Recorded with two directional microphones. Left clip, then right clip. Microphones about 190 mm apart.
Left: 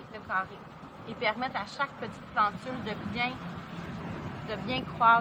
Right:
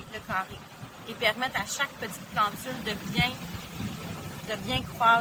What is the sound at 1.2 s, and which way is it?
Speech, 20° right (ahead or behind).